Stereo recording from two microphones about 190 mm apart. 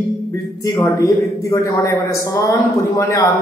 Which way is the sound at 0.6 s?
15° left (ahead or behind).